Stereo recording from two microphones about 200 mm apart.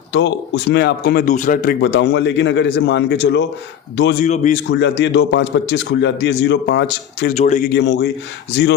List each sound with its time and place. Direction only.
0.1 s a man's voice: 60° left (ahead or behind); by 1.7 s 40° left (ahead or behind)
1.8 s a man's voice: 60° left (ahead or behind)
4.2 s a man's voice: 40° left (ahead or behind)
4.7 s a man's voice: 60° left (ahead or behind)
7.3 s a man's voice: 35° left (ahead or behind)
7.7 s a man's voice: 55° left (ahead or behind)